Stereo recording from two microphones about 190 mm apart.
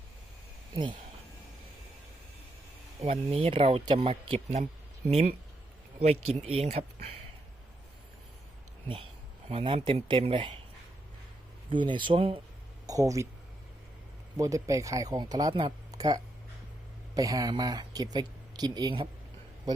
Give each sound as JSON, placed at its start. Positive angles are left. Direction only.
{"t": 3.0, "sound": "speech", "side_deg": -30}
{"t": 6.4, "sound": "speech", "side_deg": -30}
{"t": 9.5, "sound": "speech", "side_deg": -30}
{"t": 11.7, "sound": "speech", "side_deg": -25}
{"t": 12.9, "sound": "speech", "side_deg": -15}
{"t": 14.3, "sound": "speech", "side_deg": -15}